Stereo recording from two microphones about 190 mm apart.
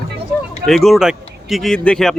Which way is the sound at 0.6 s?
Centre (ahead or behind).